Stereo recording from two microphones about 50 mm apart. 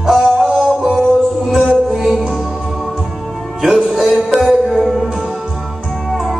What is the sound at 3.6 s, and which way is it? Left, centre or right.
Music, centre.